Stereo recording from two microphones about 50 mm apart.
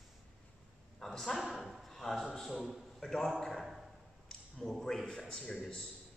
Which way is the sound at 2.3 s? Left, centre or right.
Centre.